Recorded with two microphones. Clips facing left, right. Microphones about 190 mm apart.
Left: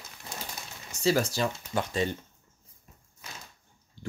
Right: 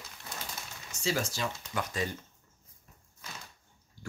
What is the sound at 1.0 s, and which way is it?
Speech, 35° left (ahead or behind).